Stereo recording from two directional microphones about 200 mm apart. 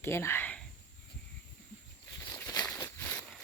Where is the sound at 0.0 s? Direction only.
10° left (ahead or behind).